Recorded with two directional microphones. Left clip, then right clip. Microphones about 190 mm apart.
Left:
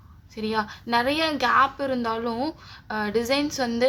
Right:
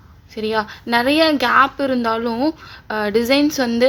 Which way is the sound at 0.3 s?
20° right (ahead or behind).